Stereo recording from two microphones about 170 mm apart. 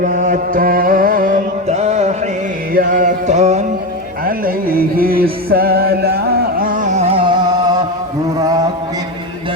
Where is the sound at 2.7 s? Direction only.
55° right (ahead or behind).